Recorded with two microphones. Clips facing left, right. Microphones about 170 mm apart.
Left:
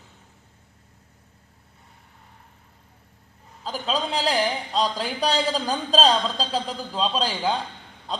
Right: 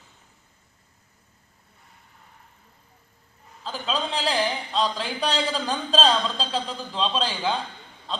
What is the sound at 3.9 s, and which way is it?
A man's voice, 10° left (ahead or behind).